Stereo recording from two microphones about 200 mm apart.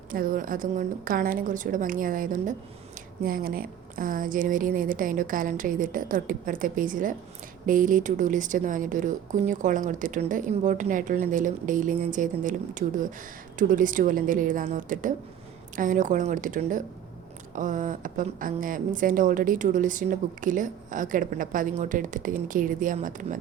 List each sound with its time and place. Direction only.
0.1 s a woman's voice: 45° right (ahead or behind)